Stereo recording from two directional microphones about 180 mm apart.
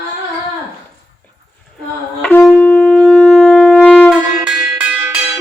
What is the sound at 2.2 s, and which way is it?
Wind instrument, 10° left (ahead or behind).